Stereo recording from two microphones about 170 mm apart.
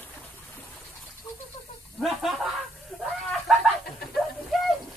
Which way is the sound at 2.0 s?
Centre (ahead or behind).